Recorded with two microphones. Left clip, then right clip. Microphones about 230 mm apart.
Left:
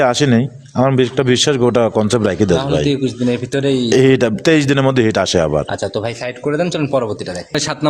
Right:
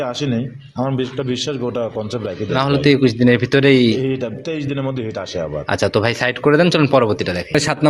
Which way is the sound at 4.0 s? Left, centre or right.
Left.